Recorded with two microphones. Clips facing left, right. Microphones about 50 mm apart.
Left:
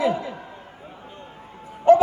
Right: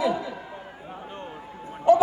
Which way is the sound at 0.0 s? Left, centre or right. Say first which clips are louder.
Left 2 dB; left.